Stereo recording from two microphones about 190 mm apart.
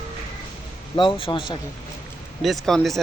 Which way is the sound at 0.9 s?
25° left (ahead or behind).